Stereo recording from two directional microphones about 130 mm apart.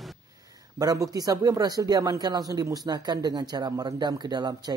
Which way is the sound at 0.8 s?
25° right (ahead or behind).